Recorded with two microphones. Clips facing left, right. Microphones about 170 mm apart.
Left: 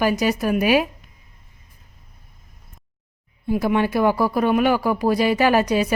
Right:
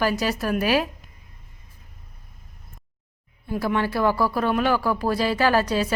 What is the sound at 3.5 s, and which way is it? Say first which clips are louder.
Speech: left 4 dB; 15° left (ahead or behind).